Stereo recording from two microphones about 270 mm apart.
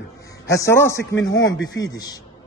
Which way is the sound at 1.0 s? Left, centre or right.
Left.